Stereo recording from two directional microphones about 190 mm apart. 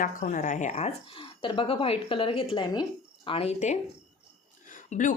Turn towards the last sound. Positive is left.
turn(degrees=40)  # may be behind; listen again after turning